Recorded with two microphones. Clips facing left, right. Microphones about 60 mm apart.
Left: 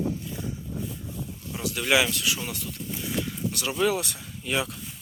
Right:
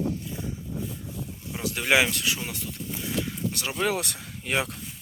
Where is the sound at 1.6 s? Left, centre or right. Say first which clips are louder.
Right 1 dB; right.